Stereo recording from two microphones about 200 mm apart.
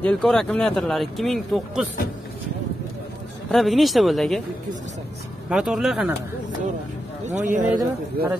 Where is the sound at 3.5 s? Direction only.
Centre (ahead or behind).